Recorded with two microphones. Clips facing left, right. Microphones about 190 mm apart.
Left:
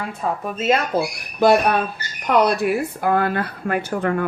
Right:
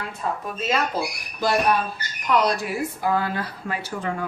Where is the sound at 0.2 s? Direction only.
60° left (ahead or behind).